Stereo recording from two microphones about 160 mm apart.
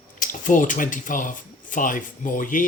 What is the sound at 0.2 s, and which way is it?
Speech, 55° left (ahead or behind).